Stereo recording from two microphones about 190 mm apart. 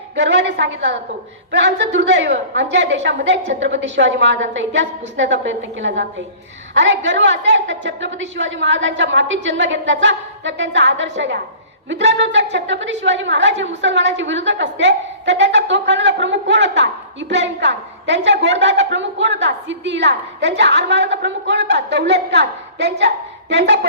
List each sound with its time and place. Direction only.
0.2 s a woman's voice: 65° right (ahead or behind)